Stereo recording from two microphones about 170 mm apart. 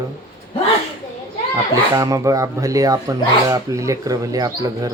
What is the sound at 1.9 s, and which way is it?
Speech, 20° right (ahead or behind).